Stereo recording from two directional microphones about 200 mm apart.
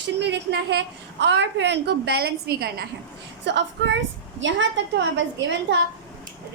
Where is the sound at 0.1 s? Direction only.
60° right (ahead or behind).